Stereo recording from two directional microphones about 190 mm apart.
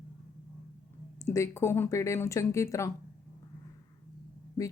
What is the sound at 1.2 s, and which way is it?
A woman's voice, 15° left (ahead or behind).